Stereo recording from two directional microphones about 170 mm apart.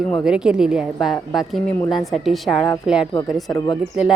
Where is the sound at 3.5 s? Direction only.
25° left (ahead or behind).